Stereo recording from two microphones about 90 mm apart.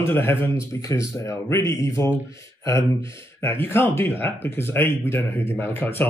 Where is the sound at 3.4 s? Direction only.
25° left (ahead or behind).